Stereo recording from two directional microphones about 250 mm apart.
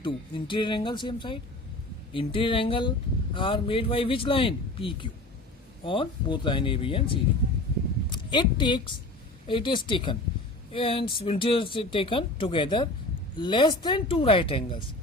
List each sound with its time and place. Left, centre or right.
0.0 s speech: centre